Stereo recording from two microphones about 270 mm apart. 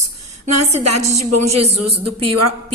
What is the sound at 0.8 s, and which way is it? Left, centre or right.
A woman's voice, right.